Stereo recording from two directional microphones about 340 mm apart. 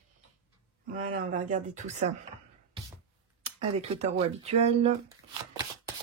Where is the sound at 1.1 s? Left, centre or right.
Right.